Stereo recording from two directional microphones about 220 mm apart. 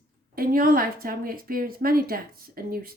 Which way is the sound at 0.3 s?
40° right (ahead or behind).